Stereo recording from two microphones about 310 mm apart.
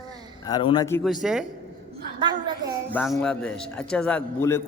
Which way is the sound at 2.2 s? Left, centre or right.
Centre.